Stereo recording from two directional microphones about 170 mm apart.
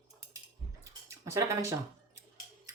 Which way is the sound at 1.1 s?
15° right (ahead or behind).